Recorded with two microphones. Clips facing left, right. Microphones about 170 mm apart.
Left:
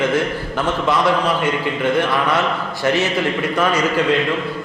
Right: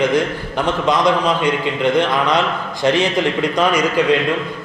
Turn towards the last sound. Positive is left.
turn(degrees=-15)  # may be behind; listen again after turning